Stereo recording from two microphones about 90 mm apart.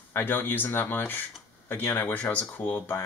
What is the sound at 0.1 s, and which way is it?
Speech, 25° left (ahead or behind).